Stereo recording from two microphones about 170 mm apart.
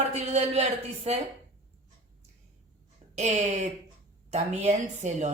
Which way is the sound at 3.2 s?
40° right (ahead or behind).